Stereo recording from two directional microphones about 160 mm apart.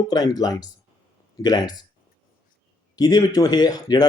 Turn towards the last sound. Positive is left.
turn(degrees=25)  # may be behind; listen again after turning